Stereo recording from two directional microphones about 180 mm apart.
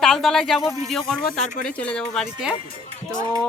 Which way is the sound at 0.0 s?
Centre (ahead or behind).